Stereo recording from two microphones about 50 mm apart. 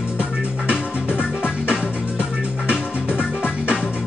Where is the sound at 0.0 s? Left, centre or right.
Centre.